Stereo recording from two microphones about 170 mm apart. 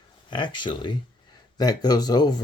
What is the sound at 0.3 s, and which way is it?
Speech, 25° left (ahead or behind).